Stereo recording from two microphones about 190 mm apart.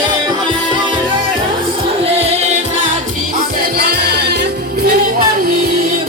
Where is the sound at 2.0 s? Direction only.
30° right (ahead or behind).